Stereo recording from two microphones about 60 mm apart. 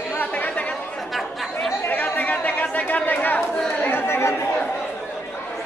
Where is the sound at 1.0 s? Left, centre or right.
Centre.